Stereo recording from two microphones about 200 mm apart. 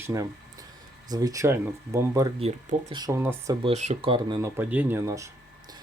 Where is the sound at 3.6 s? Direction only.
35° right (ahead or behind).